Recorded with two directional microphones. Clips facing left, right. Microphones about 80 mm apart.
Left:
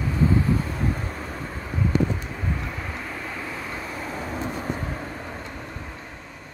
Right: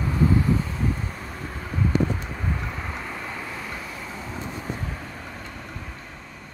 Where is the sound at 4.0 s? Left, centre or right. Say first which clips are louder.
Left 4 dB; left.